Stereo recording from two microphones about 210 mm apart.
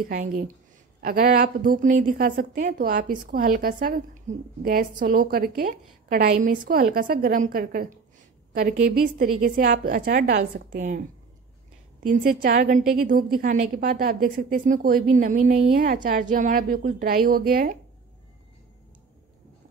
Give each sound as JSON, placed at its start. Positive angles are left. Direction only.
{"t": 1.0, "sound": "a woman's voice", "side_deg": -40}